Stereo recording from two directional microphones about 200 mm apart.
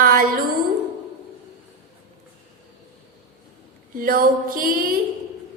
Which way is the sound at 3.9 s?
45° right (ahead or behind).